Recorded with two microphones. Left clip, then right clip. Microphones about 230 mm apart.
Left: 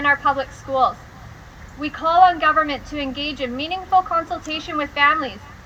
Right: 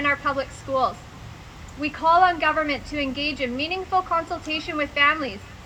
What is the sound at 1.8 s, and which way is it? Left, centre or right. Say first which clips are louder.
Speech: left 3 dB; centre.